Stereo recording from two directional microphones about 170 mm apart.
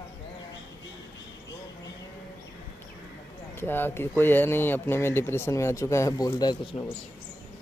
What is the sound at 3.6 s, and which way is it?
Speech, 10° left (ahead or behind).